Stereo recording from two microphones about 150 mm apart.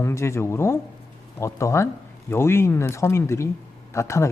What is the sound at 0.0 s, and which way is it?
Speech, 20° left (ahead or behind).